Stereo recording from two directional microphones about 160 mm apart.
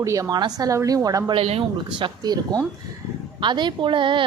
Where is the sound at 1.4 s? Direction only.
40° right (ahead or behind).